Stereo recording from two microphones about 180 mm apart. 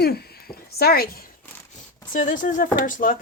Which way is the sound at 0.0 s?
60° left (ahead or behind).